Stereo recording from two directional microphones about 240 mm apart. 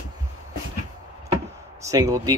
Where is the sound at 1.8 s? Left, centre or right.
Centre.